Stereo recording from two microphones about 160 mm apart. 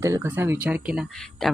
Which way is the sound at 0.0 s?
15° right (ahead or behind).